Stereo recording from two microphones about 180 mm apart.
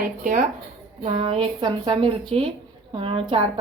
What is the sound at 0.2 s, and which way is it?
A woman's voice, 45° right (ahead or behind).